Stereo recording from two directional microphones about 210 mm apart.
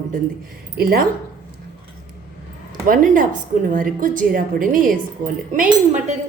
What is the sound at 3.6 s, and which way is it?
A woman's voice, 40° right (ahead or behind).